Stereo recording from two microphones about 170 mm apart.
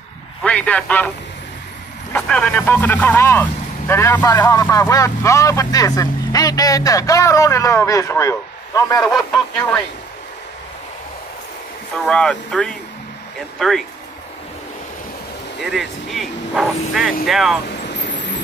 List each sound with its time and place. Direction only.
0.4 s a man's voice: 5° left (ahead or behind)
2.1 s speech: 5° left (ahead or behind)
9.0 s speech: 5° left (ahead or behind)
12.1 s speech: 5° left (ahead or behind)
15.6 s speech: centre (ahead or behind)